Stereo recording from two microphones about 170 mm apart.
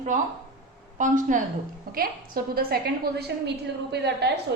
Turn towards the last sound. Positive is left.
turn(degrees=-80)